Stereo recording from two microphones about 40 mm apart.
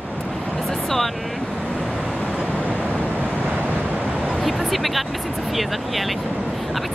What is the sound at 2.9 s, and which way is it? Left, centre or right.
Waves, right.